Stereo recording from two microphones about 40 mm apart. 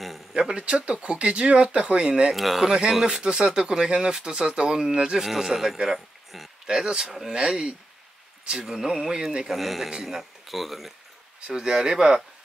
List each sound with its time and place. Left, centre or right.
0.3 s speech: right
2.3 s speech: centre
2.6 s speech: right; by 6.5 s centre
6.7 s speech: centre
9.5 s speech: centre
11.4 s speech: right